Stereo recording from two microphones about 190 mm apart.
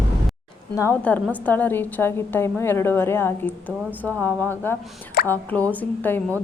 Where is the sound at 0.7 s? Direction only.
10° left (ahead or behind).